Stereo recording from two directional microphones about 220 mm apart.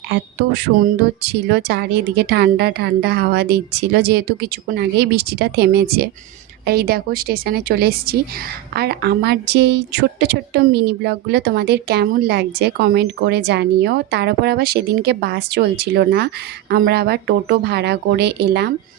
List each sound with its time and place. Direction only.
0.1 s a woman's voice: 50° right (ahead or behind)